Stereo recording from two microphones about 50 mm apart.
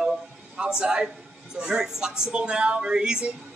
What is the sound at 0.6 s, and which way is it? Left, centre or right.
A woman's voice, centre.